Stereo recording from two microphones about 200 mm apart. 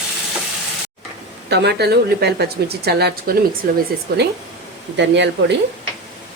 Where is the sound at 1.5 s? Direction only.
55° right (ahead or behind).